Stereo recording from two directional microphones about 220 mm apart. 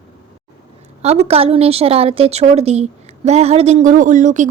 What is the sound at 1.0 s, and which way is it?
A woman's voice, 30° right (ahead or behind).